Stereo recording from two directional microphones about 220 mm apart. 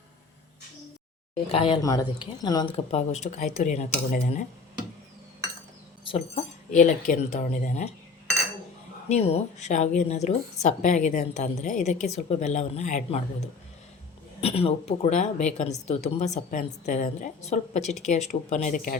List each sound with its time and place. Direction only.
1.5 s speech: 25° left (ahead or behind)
6.1 s speech: 25° left (ahead or behind)
9.0 s speech: 30° left (ahead or behind)
14.4 s speech: 25° left (ahead or behind)